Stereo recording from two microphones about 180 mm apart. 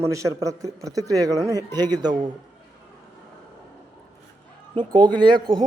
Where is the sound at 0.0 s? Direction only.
15° right (ahead or behind).